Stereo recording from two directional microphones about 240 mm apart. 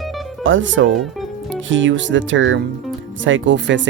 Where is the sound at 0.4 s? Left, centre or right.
Right.